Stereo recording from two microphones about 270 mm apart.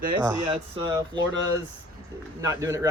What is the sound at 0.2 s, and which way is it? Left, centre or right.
Speech, centre.